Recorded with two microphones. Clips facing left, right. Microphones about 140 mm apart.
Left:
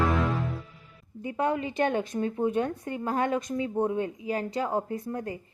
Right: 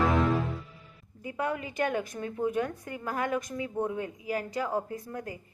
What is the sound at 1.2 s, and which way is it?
A woman's voice, 25° left (ahead or behind).